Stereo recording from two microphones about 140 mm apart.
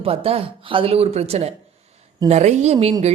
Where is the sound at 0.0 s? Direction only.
45° right (ahead or behind).